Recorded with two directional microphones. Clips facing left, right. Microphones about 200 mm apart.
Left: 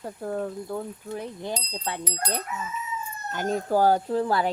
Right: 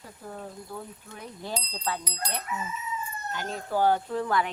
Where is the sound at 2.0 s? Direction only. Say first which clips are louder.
Left 3 dB; 50° left (ahead or behind).